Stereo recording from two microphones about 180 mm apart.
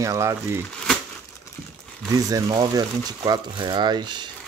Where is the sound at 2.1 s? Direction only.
20° right (ahead or behind).